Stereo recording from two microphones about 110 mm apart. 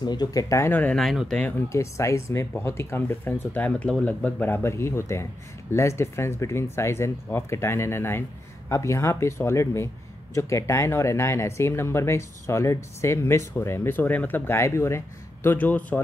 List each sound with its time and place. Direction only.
0.0 s speech: 40° left (ahead or behind); by 0.9 s 15° left (ahead or behind)
0.9 s speech: centre (ahead or behind)
1.7 s speech: 25° left (ahead or behind)